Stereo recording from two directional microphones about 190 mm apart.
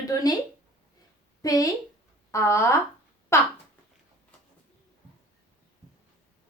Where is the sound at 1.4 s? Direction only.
20° left (ahead or behind).